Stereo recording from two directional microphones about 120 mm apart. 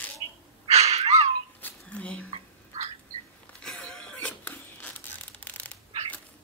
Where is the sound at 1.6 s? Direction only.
10° left (ahead or behind).